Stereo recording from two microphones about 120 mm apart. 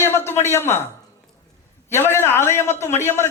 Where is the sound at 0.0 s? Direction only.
20° left (ahead or behind).